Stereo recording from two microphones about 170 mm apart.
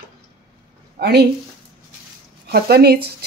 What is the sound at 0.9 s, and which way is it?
Speech, 70° right (ahead or behind).